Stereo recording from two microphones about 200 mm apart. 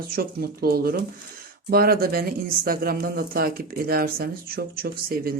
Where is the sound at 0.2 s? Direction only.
50° right (ahead or behind).